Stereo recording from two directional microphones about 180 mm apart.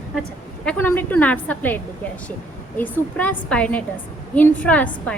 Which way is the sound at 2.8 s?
10° left (ahead or behind).